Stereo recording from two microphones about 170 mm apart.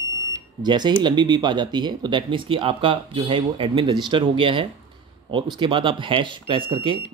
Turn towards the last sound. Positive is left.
turn(degrees=-30)  # may be behind; listen again after turning